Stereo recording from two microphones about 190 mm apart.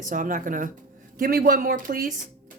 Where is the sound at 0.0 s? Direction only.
45° right (ahead or behind).